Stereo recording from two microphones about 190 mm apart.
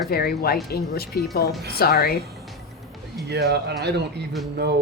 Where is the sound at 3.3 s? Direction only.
60° right (ahead or behind).